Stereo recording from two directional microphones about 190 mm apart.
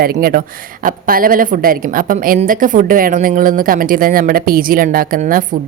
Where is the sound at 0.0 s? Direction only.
55° right (ahead or behind).